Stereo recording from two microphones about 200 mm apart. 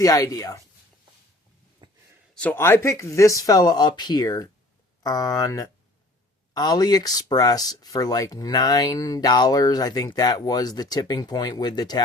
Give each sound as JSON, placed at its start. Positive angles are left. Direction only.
{"t": 0.0, "sound": "speech", "side_deg": 15}
{"t": 1.8, "sound": "a sound", "side_deg": -25}
{"t": 2.3, "sound": "speech", "side_deg": 5}